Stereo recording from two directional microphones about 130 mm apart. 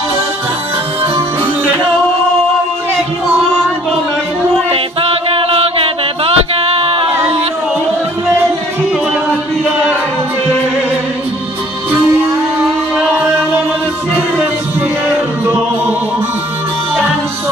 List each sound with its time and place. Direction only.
4.6 s music: 45° right (ahead or behind)
12.9 s music: 10° right (ahead or behind)